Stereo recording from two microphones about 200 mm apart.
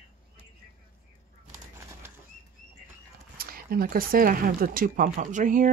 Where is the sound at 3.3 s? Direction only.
45° right (ahead or behind).